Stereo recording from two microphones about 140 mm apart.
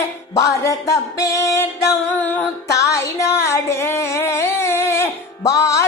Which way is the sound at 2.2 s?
10° left (ahead or behind).